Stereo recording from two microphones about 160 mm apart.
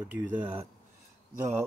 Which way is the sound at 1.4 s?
15° right (ahead or behind).